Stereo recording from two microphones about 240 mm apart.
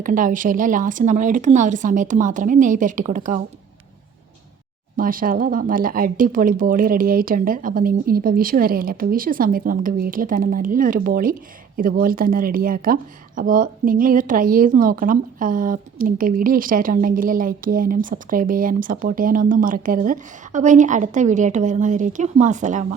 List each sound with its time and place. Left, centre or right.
0.0 s speech: right
4.9 s speech: right